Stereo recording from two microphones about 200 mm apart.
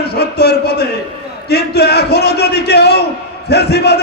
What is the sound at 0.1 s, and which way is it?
A man's voice, 50° left (ahead or behind).